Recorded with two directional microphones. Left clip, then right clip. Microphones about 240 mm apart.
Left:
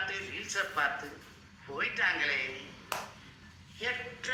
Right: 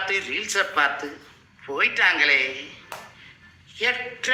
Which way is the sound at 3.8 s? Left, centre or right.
Right.